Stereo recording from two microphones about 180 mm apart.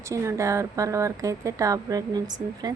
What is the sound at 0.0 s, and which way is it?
Speech, 15° right (ahead or behind).